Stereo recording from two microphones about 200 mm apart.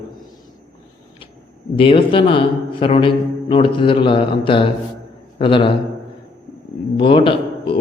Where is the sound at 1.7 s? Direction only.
25° left (ahead or behind).